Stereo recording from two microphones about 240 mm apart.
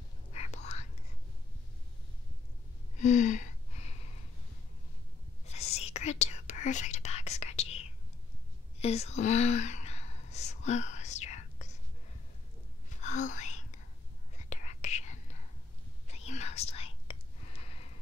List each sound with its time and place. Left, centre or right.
0.3 s whispering: left
3.0 s a sound: left
5.4 s whispering: left
8.7 s a sound: left
13.0 s wail: left
14.5 s whispering: left